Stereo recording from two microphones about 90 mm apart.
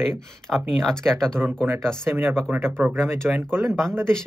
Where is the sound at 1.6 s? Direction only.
25° right (ahead or behind).